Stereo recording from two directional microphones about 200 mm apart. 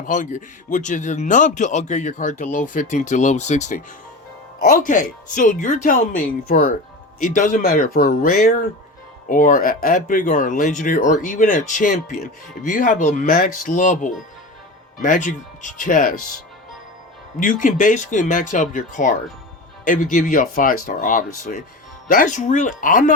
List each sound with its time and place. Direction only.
0.0 s speech: 40° left (ahead or behind)
17.4 s speech: 40° left (ahead or behind)